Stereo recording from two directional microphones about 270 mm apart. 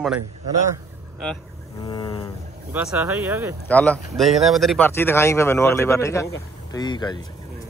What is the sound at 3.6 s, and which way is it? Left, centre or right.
Speech, centre.